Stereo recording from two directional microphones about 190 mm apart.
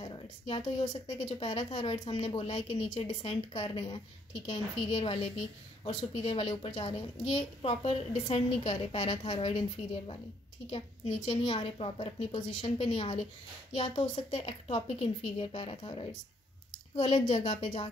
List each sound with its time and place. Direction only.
0.0 s a child's voice: 25° left (ahead or behind)
11.2 s a child's voice: 30° left (ahead or behind)